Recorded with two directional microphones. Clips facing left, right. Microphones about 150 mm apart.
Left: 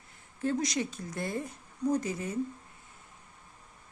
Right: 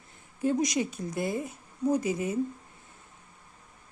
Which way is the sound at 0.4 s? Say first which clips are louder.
Right 4 dB; 15° right (ahead or behind).